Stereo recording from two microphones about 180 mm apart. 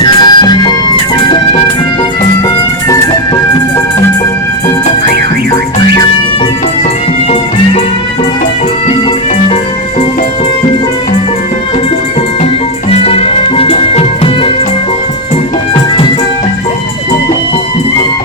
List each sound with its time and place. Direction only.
0.0 s music: 25° left (ahead or behind)
12.9 s music: 35° left (ahead or behind)